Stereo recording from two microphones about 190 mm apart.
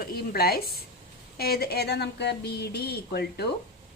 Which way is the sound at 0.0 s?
55° left (ahead or behind).